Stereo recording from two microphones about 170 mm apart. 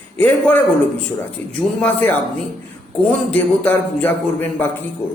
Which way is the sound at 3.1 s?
5° left (ahead or behind).